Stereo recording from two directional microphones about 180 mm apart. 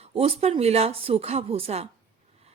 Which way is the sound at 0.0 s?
35° right (ahead or behind).